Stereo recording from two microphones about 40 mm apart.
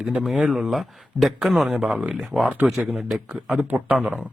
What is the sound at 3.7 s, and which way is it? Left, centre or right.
Speech, right.